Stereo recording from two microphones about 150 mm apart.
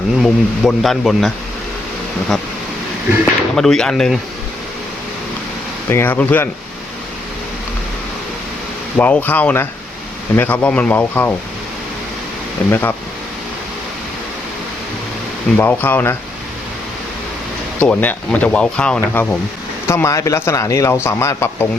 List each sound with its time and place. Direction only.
0.2 s speech: centre (ahead or behind)
3.5 s speech: 5° left (ahead or behind)
5.9 s speech: 15° left (ahead or behind)
9.0 s speech: 10° left (ahead or behind)
12.6 s speech: 10° left (ahead or behind)
15.5 s speech: 15° left (ahead or behind)
17.7 s a man's voice: 10° left (ahead or behind)